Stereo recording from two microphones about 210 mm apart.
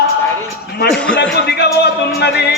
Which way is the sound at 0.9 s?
5° left (ahead or behind).